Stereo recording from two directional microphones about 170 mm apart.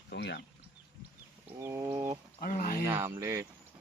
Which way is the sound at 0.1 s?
90° left.